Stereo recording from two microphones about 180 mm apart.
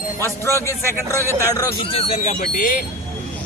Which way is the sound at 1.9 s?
30° left (ahead or behind).